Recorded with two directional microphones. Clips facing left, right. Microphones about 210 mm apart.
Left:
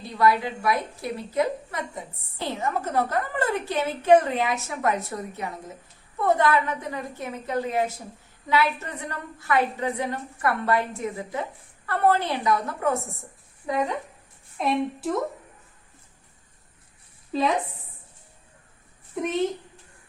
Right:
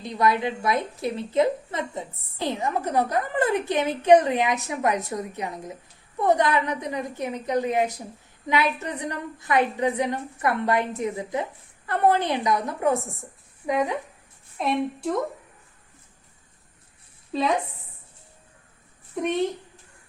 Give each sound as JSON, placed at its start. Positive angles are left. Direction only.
{"t": 0.0, "sound": "a woman's voice", "side_deg": -20}
{"t": 14.6, "sound": "a woman's voice", "side_deg": 0}
{"t": 17.3, "sound": "a woman's voice", "side_deg": 0}
{"t": 19.2, "sound": "a woman's voice", "side_deg": 0}